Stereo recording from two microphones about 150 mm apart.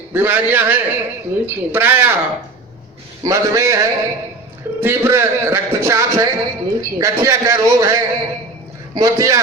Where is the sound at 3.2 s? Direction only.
20° right (ahead or behind).